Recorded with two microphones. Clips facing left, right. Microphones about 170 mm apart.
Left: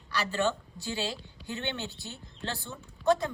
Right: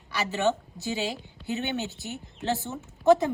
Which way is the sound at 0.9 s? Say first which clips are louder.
Right 3 dB; 15° right (ahead or behind).